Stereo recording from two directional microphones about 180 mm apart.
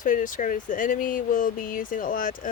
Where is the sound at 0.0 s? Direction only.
45° left (ahead or behind).